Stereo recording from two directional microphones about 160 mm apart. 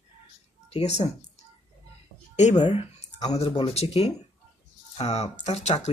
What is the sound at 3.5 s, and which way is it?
Speech, 40° left (ahead or behind).